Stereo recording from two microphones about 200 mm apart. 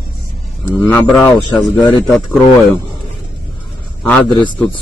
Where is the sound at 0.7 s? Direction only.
10° left (ahead or behind).